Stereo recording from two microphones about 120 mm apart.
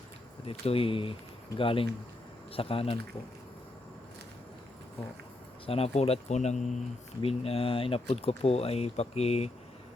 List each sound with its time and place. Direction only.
0.4 s speech: 55° left (ahead or behind)
5.6 s speech: 55° left (ahead or behind); by 6.6 s 70° left (ahead or behind)
7.2 s speech: 55° left (ahead or behind)